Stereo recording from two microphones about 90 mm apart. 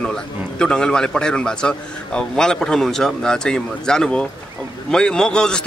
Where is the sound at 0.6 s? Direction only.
10° left (ahead or behind).